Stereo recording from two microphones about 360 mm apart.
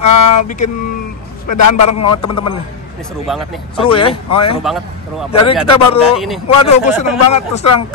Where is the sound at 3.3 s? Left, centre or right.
Centre.